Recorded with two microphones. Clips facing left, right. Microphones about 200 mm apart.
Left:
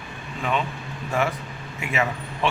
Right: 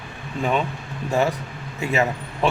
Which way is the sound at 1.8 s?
35° right (ahead or behind).